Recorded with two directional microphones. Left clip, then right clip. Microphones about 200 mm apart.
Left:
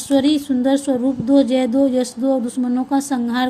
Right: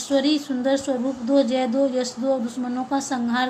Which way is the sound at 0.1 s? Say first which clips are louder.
Left 5 dB; 45° left (ahead or behind).